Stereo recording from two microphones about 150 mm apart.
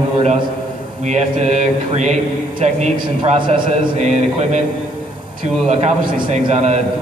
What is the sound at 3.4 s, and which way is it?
Speech, 35° right (ahead or behind).